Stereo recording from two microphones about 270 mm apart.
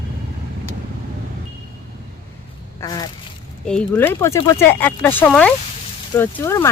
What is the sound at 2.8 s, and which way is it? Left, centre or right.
Speech, centre.